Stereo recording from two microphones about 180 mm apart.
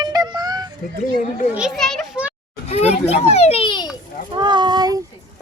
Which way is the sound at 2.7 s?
35° left (ahead or behind).